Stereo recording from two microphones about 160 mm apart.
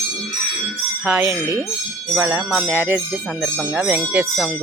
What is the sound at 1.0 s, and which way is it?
Speech, 5° right (ahead or behind).